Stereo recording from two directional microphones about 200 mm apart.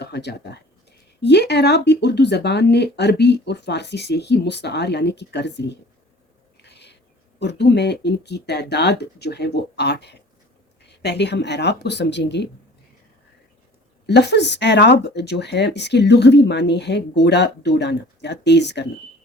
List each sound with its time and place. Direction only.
0.0 s speech: 55° left (ahead or behind)
6.6 s owl: 60° left (ahead or behind)
7.3 s speech: 60° left (ahead or behind)
14.1 s speech: 60° left (ahead or behind)